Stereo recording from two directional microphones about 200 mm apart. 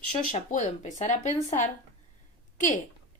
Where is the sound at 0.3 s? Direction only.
40° left (ahead or behind).